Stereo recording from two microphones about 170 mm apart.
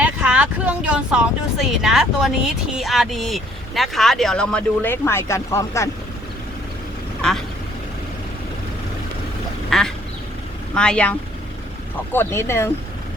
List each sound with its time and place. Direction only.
0.0 s vehicle: 5° right (ahead or behind)
2.7 s speech: centre (ahead or behind); by 5.9 s 15° left (ahead or behind)
9.6 s quack: centre (ahead or behind)
10.8 s speech: 5° left (ahead or behind)